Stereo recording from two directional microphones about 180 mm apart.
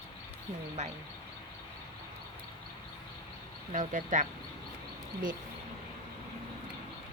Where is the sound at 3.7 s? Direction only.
45° right (ahead or behind).